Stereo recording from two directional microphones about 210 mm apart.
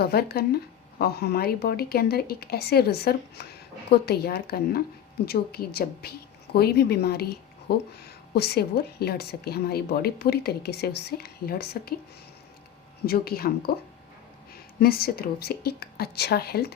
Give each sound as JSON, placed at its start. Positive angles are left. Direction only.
{"t": 0.0, "sound": "a woman's voice", "side_deg": 50}
{"t": 13.1, "sound": "a woman's voice", "side_deg": 45}
{"t": 14.8, "sound": "a woman's voice", "side_deg": 45}